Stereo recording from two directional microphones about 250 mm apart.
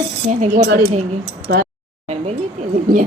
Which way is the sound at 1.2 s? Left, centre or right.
Right.